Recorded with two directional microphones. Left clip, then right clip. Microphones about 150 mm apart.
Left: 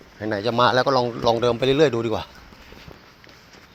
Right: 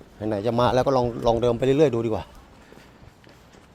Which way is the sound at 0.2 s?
25° right (ahead or behind).